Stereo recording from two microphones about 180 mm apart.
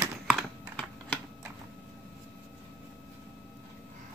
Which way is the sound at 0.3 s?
5° left (ahead or behind).